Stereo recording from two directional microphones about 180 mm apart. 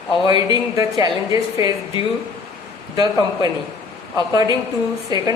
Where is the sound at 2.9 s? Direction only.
20° right (ahead or behind).